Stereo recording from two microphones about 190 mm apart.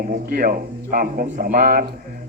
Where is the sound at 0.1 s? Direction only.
45° right (ahead or behind).